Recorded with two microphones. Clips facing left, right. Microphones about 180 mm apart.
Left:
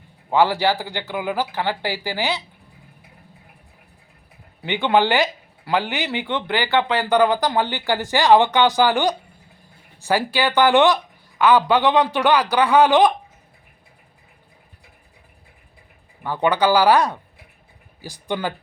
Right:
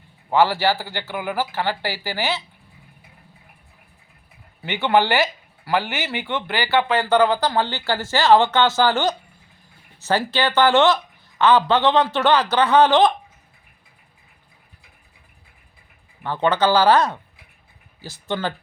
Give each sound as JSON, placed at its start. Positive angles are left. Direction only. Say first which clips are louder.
{"t": 0.3, "sound": "speech", "louder": "even", "side_deg": 15}
{"t": 4.6, "sound": "speech", "louder": "left 1 dB", "side_deg": 15}
{"t": 16.2, "sound": "speech", "louder": "even", "side_deg": 10}